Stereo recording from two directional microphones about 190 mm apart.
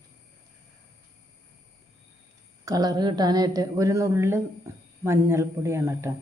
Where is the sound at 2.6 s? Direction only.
20° right (ahead or behind).